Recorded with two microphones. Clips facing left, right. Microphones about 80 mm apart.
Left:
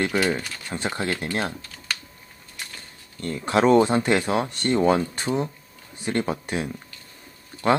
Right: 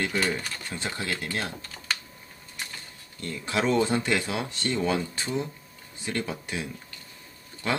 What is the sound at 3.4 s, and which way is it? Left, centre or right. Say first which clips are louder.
Speech: left 7 dB; left.